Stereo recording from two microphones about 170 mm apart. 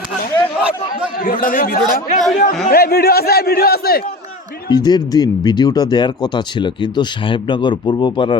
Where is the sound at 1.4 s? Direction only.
55° left (ahead or behind).